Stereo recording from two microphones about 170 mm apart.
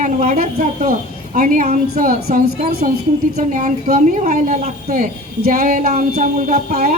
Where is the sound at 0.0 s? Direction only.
50° right (ahead or behind).